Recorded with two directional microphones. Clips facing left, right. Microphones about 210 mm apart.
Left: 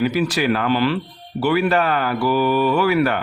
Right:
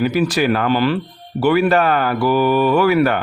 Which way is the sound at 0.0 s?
45° right (ahead or behind).